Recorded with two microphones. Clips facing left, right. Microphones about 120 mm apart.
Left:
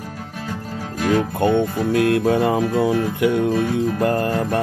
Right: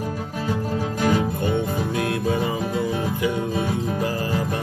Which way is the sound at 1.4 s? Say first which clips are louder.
Left 5 dB; 60° left (ahead or behind).